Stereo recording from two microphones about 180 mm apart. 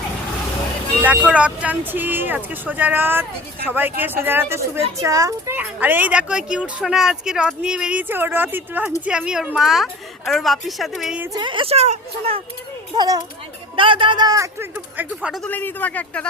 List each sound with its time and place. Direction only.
1.3 s a woman's voice: 5° right (ahead or behind)
11.3 s a woman's voice: 25° right (ahead or behind)
13.0 s a man's voice: 25° right (ahead or behind); by 15.4 s 5° right (ahead or behind)
15.4 s speech: 10° left (ahead or behind)